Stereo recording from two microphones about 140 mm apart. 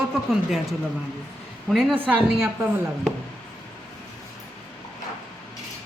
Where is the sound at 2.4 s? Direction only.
15° right (ahead or behind).